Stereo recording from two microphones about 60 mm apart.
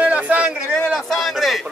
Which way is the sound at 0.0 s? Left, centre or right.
Right.